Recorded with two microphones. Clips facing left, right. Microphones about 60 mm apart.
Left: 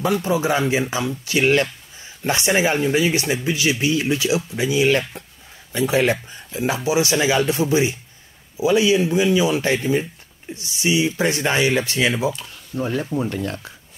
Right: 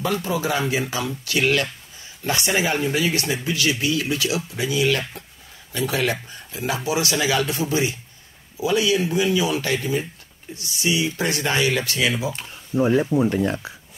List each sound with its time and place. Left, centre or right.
0.0 s speech: centre
12.4 s speech: centre